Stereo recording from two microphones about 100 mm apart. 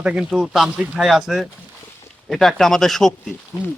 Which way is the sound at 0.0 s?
10° right (ahead or behind).